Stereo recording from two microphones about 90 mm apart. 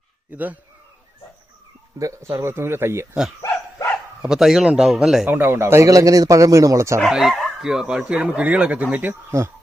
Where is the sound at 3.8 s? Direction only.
35° left (ahead or behind).